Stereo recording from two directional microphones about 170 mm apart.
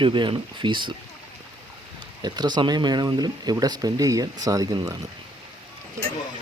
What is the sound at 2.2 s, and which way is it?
Speech, 25° right (ahead or behind).